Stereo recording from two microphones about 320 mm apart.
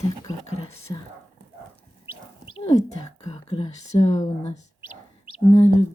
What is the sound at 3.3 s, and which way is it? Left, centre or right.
Speech, centre.